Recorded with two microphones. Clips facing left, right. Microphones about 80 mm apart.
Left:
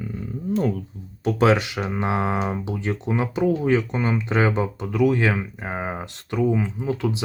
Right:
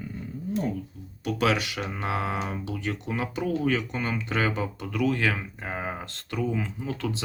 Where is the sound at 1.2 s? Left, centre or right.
Left.